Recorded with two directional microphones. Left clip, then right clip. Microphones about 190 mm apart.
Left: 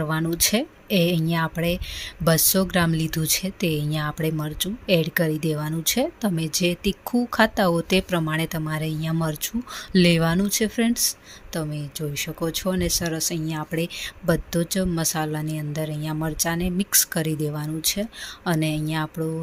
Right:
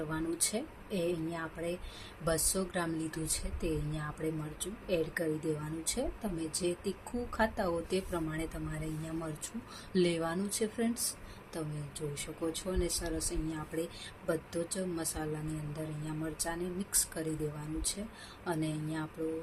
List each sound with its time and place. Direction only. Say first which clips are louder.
0.1 s speech: left 15 dB; 50° left (ahead or behind)
18.4 s speech: left 11 dB; 50° left (ahead or behind)